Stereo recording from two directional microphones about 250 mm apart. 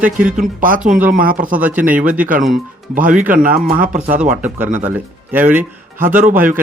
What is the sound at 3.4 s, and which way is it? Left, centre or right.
Speech, right.